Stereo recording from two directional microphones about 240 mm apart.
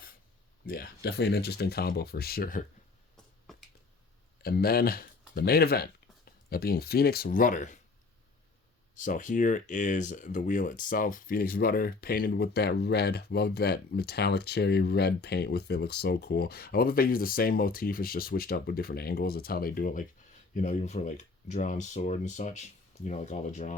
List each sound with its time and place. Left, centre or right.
0.6 s speech: left
4.4 s speech: left
9.0 s speech: left